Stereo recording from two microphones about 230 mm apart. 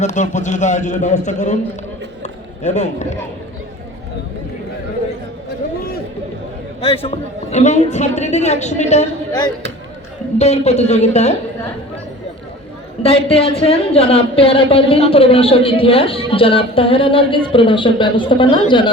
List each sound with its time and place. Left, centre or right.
0.0 s a man's voice: left
2.2 s a sound: left
6.8 s a woman's voice: left
10.3 s a woman's voice: left
13.0 s a woman's voice: left